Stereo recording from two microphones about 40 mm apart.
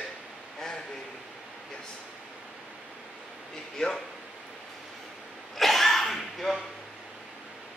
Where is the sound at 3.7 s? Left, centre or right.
Centre.